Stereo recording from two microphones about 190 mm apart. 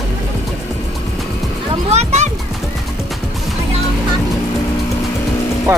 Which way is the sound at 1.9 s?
35° right (ahead or behind).